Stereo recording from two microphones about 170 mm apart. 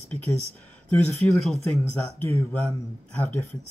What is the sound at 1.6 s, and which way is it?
Speech, 15° left (ahead or behind).